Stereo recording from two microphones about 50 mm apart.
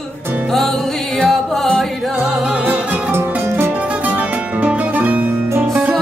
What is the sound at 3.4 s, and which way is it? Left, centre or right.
Music, right.